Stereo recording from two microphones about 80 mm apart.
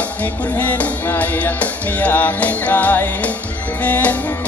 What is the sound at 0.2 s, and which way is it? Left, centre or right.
Music, centre.